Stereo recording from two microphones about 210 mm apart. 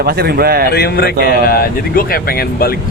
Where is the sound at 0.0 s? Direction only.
45° right (ahead or behind).